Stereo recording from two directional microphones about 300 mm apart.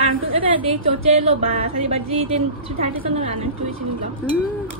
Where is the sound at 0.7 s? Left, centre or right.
Right.